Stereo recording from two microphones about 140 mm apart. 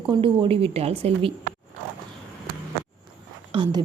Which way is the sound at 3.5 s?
35° right (ahead or behind).